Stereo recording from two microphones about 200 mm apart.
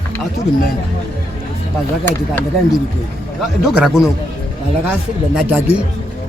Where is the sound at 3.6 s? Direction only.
5° right (ahead or behind).